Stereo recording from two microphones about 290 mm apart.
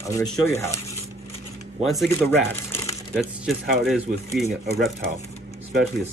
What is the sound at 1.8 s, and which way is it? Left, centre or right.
Speech, centre.